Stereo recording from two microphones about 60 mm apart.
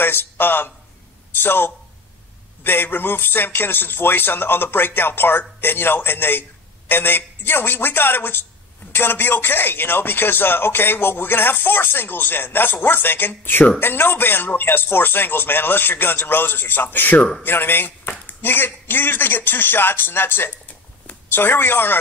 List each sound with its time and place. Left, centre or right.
0.0 s a man's voice: left